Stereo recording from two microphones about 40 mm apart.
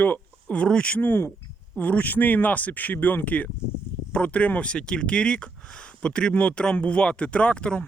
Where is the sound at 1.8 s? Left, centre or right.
Left.